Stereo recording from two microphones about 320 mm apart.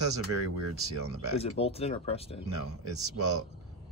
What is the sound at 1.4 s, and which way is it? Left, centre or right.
Speech, centre.